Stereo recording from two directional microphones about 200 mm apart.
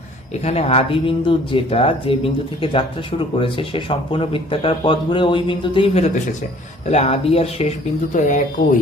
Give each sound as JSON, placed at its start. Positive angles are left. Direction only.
{"t": 0.4, "sound": "speech", "side_deg": 30}